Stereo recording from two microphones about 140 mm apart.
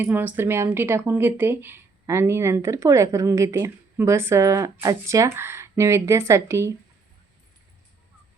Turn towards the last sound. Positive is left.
turn(degrees=-20)  # may be behind; listen again after turning